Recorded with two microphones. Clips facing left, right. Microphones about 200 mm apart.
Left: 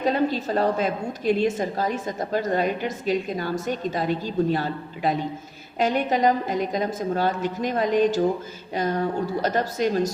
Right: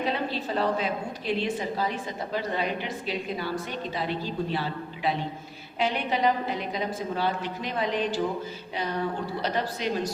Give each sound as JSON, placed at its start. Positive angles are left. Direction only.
{"t": 0.0, "sound": "a woman's voice", "side_deg": 45}